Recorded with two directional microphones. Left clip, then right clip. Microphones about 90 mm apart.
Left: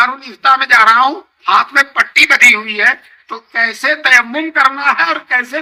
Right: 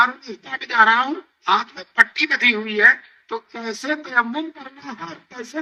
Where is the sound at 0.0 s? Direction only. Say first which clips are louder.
Left 7 dB; 40° left (ahead or behind).